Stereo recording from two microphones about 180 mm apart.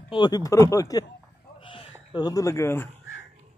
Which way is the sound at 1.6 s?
30° left (ahead or behind).